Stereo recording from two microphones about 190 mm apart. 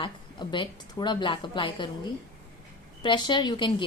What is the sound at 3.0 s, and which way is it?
Speech, 25° left (ahead or behind).